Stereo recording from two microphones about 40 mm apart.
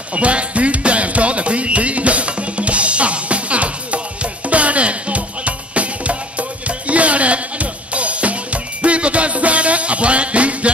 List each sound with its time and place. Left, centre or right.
0.1 s music: right